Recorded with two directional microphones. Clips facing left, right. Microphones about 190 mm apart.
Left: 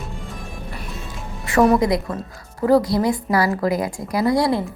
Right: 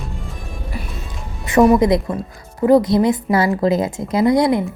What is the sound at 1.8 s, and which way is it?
A woman's voice, 20° right (ahead or behind).